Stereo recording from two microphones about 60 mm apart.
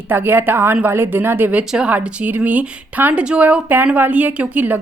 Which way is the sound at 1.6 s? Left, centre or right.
Right.